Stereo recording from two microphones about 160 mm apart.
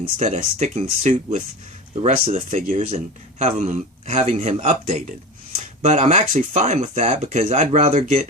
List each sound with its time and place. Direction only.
0.2 s a man's voice: 45° right (ahead or behind)